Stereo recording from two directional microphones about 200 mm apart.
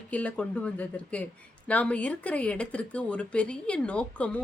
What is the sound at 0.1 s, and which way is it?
Speech, 5° left (ahead or behind).